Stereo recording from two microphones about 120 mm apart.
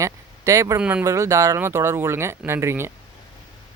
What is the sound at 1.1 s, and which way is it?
Speech, 25° right (ahead or behind).